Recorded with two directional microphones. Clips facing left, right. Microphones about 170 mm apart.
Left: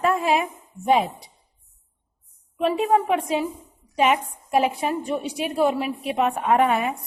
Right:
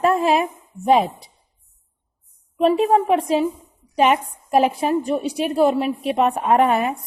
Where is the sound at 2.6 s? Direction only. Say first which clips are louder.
Right 4 dB; 30° right (ahead or behind).